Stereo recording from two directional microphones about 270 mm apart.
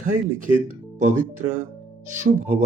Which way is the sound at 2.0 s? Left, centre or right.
Right.